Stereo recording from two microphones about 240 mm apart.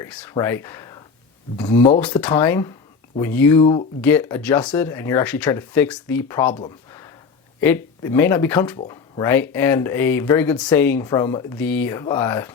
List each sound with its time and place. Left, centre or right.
0.0 s speech: centre
3.6 s speech: left
4.0 s speech: centre